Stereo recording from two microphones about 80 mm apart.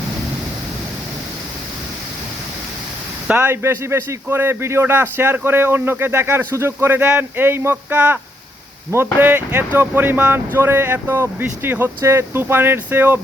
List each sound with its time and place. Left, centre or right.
3.2 s speech: right